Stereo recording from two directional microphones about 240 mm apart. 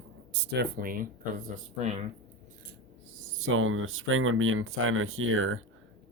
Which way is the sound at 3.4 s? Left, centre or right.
Right.